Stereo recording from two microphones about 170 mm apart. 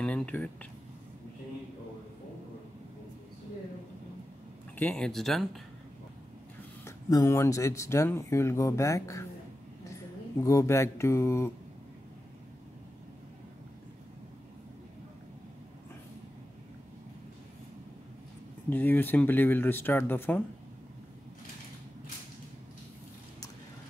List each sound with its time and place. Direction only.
0.0 s speech: 5° left (ahead or behind)
4.7 s speech: 5° left (ahead or behind)
6.8 s speech: 20° left (ahead or behind)
10.4 s speech: 20° left (ahead or behind)
18.7 s speech: 10° left (ahead or behind)